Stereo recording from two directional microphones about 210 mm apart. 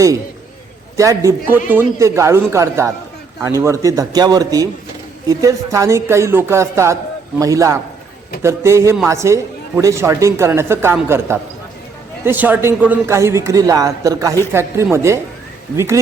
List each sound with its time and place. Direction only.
0.9 s a woman's voice: 15° right (ahead or behind)